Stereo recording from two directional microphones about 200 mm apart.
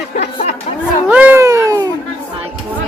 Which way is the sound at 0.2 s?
35° left (ahead or behind).